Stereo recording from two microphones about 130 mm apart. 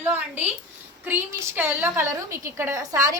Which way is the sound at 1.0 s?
15° right (ahead or behind).